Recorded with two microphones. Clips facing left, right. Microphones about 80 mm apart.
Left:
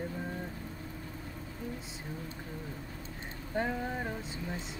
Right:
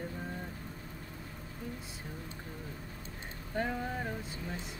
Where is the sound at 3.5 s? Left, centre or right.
Centre.